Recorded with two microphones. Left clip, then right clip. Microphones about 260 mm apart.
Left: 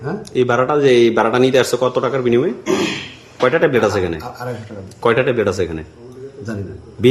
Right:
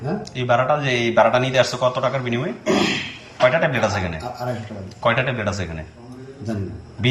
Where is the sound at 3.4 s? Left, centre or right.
Centre.